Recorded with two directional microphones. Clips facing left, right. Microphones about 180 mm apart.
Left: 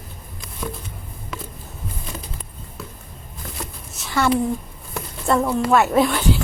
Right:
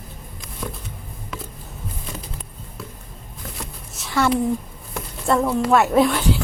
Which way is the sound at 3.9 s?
Centre (ahead or behind).